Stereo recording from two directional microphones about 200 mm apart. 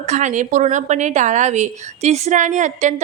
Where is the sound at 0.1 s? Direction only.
35° right (ahead or behind).